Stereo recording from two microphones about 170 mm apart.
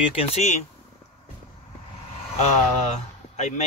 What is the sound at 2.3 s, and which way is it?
Speech, 45° left (ahead or behind).